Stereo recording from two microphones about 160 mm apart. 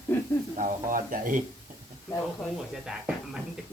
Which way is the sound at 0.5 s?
55° right (ahead or behind).